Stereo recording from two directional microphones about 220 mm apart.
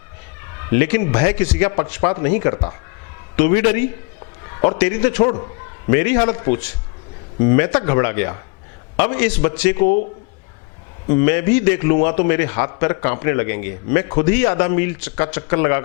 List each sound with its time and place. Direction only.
0.7 s a man's voice: 15° left (ahead or behind)
9.8 s speech: 45° left (ahead or behind)
11.1 s a man's voice: 15° left (ahead or behind)